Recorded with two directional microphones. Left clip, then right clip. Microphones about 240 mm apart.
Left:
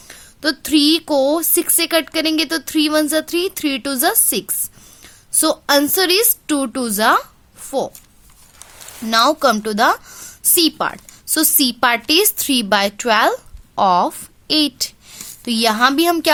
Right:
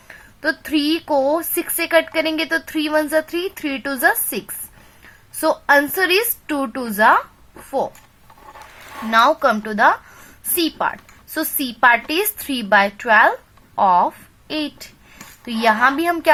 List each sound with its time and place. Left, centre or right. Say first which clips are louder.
0.1 s a woman's voice: left 1 dB; left
9.0 s a woman's voice: even; left